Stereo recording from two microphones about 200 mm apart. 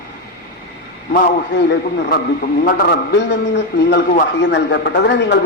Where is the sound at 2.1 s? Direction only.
45° left (ahead or behind).